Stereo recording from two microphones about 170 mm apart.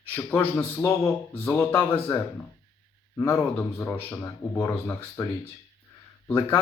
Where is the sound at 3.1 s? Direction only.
10° left (ahead or behind).